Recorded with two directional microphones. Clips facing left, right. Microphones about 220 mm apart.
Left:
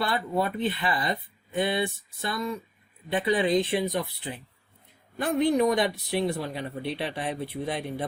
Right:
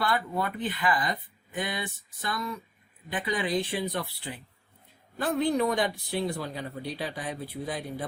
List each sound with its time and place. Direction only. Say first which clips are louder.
0.0 s speech: left 2 dB; 20° left (ahead or behind)
5.4 s speech: left 4 dB; 20° left (ahead or behind)